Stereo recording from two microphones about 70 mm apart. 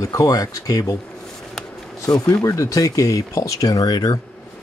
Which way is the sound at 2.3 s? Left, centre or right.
Left.